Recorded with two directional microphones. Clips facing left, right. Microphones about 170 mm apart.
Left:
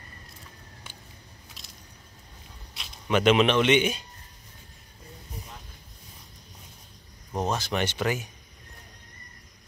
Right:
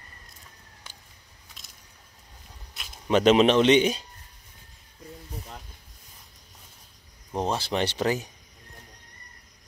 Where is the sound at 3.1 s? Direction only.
35° right (ahead or behind).